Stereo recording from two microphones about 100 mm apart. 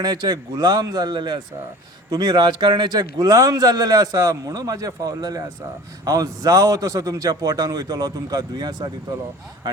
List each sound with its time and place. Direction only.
0.0 s a man's voice: 40° right (ahead or behind)